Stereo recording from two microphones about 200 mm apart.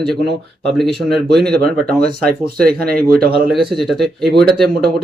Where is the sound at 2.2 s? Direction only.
50° right (ahead or behind).